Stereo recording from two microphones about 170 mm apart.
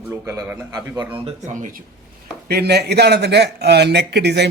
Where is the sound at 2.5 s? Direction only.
70° right (ahead or behind).